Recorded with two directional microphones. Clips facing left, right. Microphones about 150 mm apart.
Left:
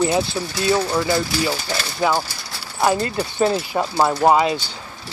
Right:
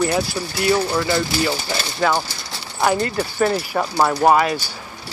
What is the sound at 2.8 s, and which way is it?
Speech, 25° left (ahead or behind).